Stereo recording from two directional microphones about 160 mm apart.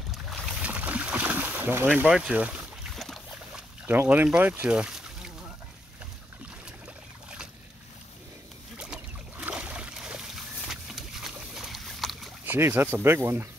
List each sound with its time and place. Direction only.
0.1 s boat: centre (ahead or behind)
3.8 s speech: 10° right (ahead or behind)
8.7 s boat: 5° right (ahead or behind)
12.4 s speech: 15° right (ahead or behind)